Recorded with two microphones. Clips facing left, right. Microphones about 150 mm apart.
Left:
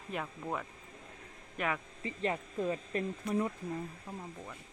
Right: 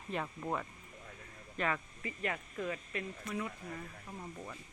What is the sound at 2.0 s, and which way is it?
Speech, 30° left (ahead or behind).